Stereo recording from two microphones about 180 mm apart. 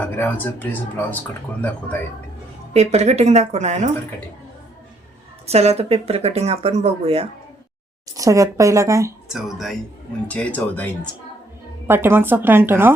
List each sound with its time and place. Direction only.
0.0 s speech: 10° left (ahead or behind)
2.7 s speech: 35° right (ahead or behind)
5.5 s speech: 35° right (ahead or behind)
8.1 s speech: 20° right (ahead or behind)
9.3 s speech: centre (ahead or behind)
11.9 s speech: 10° right (ahead or behind)